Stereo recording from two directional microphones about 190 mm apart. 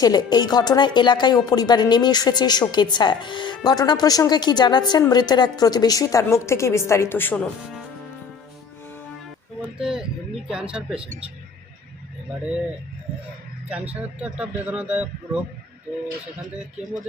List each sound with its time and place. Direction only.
0.0 s speech: 20° left (ahead or behind)
9.7 s speech: 5° right (ahead or behind)
13.7 s a man's voice: 5° right (ahead or behind)